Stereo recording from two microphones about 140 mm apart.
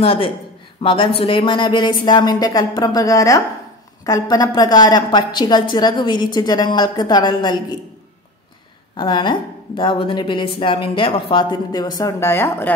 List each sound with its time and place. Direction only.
0.0 s a woman's voice: 40° left (ahead or behind)
8.9 s a woman's voice: 35° left (ahead or behind); by 12.7 s 15° left (ahead or behind)